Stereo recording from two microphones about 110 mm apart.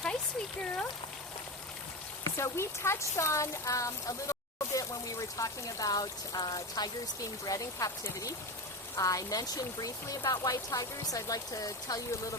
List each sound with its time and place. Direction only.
2.2 s speech: 25° left (ahead or behind)